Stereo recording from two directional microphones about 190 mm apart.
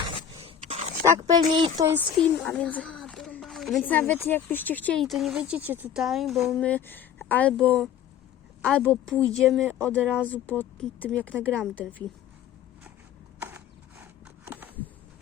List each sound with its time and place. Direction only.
0.3 s scrape: 35° right (ahead or behind)
1.0 s speech: 15° right (ahead or behind)
2.0 s a woman's voice: 5° left (ahead or behind)
6.7 s speech: 10° left (ahead or behind)
14.0 s a sound: 10° right (ahead or behind)